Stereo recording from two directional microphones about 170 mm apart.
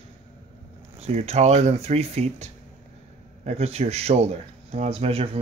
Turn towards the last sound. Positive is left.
turn(degrees=-35)  # may be behind; listen again after turning